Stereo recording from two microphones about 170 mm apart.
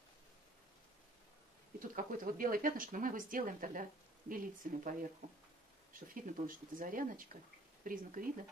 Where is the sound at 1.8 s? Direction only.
55° right (ahead or behind).